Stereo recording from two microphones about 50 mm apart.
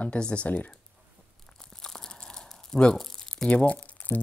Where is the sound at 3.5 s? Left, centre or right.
Left.